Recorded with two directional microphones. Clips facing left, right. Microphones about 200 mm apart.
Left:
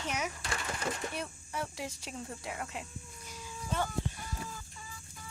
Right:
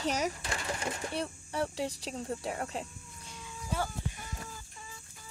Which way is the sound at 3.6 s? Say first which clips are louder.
Even; 5° right (ahead or behind).